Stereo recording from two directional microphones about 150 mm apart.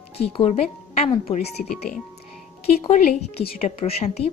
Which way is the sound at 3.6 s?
40° left (ahead or behind).